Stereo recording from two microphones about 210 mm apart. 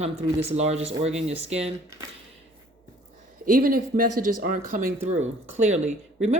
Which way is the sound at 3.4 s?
40° right (ahead or behind).